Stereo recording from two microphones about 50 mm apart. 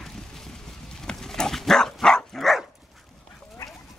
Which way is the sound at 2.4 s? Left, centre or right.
Centre.